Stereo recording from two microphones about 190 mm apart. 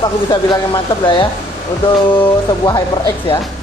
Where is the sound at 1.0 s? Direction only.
25° left (ahead or behind).